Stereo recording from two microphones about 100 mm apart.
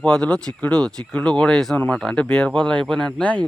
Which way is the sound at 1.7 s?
15° left (ahead or behind).